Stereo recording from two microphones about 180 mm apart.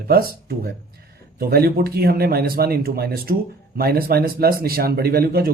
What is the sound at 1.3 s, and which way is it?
Speech, 55° right (ahead or behind).